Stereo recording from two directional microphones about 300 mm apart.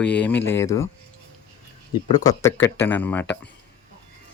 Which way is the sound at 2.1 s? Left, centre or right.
Centre.